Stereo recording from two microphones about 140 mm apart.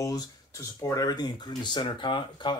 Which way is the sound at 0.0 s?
25° left (ahead or behind).